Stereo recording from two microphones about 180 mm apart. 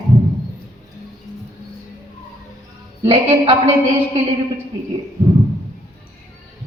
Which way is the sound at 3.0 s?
30° right (ahead or behind).